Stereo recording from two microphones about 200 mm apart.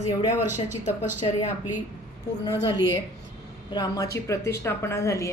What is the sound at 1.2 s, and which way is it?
Speech, 25° left (ahead or behind).